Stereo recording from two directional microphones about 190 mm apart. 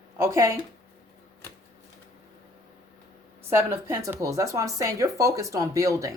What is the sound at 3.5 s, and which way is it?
Speech, 15° right (ahead or behind).